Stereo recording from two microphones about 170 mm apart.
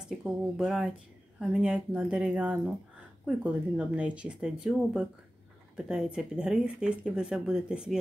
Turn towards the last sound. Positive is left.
turn(degrees=-5)  # may be behind; listen again after turning